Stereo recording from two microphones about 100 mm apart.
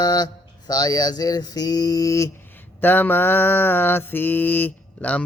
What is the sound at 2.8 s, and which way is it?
Mantra, 20° left (ahead or behind).